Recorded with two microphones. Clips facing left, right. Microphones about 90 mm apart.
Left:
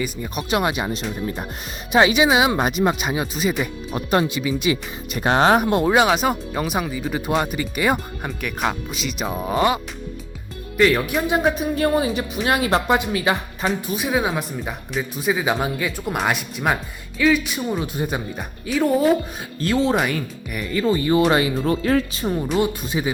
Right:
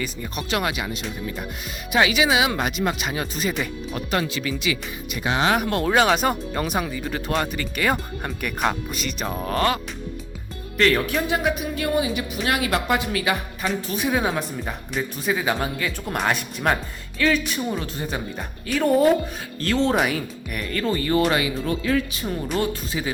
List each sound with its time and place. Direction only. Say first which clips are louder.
0.0 s speech: left 3 dB; 15° left (ahead or behind)
3.3 s speech: left 3 dB; 5° left (ahead or behind)
3.9 s speech: left 5 dB; 25° left (ahead or behind)
4.7 s speech: left 4 dB; 45° left (ahead or behind)
5.5 s speech: left 3 dB; 20° left (ahead or behind)
6.1 s speech: left 1 dB; 5° left (ahead or behind)
8.2 s speech: even; centre (ahead or behind)
11.4 s speech: left 4 dB; 35° left (ahead or behind)
13.8 s speech: right 2 dB; 5° left (ahead or behind)
18.7 s speech: even; 5° left (ahead or behind)
20.7 s speech: left 4 dB; 15° left (ahead or behind)
21.2 s speech: left 3 dB; 30° left (ahead or behind)
22.6 s speech: left 3 dB; 20° left (ahead or behind)